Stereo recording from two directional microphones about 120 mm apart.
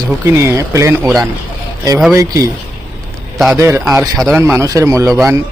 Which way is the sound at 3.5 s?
20° right (ahead or behind).